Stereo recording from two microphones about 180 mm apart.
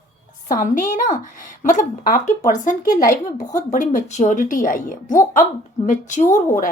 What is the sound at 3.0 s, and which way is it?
Speech, 20° left (ahead or behind).